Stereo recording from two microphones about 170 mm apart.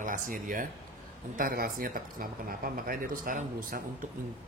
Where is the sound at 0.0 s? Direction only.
50° right (ahead or behind).